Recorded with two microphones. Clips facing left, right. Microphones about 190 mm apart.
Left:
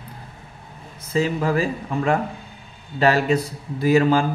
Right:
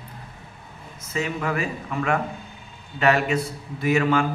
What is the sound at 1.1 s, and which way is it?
A man's voice, 30° left (ahead or behind).